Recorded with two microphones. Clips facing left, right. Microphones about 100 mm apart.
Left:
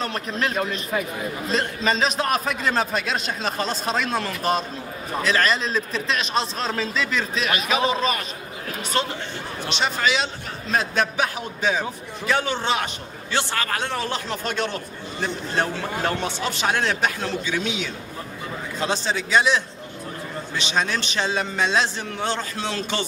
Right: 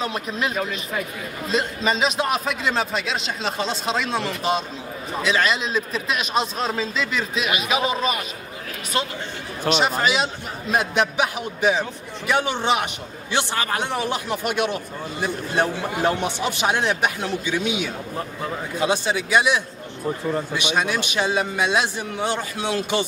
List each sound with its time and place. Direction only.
0.0 s a man's voice: 5° right (ahead or behind)
9.7 s a man's voice: 5° right (ahead or behind)